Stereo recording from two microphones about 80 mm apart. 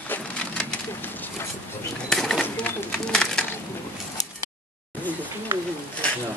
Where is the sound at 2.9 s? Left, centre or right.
Centre.